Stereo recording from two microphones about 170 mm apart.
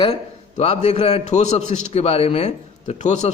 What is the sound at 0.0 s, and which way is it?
A man's voice, 35° left (ahead or behind).